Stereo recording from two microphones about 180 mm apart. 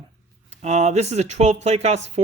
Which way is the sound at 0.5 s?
40° right (ahead or behind).